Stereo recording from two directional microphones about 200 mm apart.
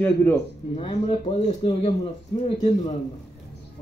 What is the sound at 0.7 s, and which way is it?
Speech, 25° left (ahead or behind).